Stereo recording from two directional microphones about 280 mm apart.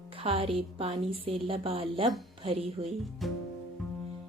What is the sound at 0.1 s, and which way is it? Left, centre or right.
A woman's voice, centre.